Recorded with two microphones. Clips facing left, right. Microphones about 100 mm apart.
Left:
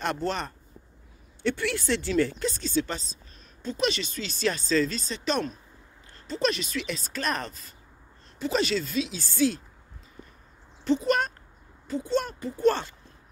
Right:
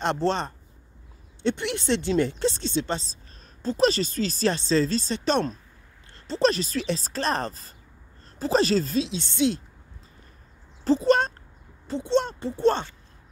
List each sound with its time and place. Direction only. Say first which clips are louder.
0.0 s speech: right 4 dB; 25° right (ahead or behind)
10.8 s a sound: right 4 dB; 35° right (ahead or behind)
11.9 s speech: right 3 dB; 25° right (ahead or behind)